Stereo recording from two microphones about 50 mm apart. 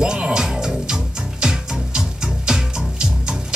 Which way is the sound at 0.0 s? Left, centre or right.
Centre.